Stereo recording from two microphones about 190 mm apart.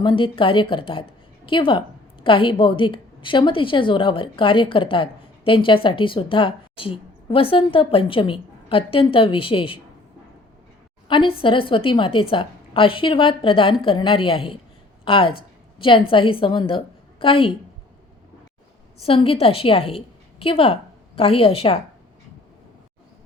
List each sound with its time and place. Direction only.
0.0 s a woman's voice: 25° left (ahead or behind)
11.1 s a woman's voice: 25° left (ahead or behind)
19.0 s a woman's voice: 30° left (ahead or behind)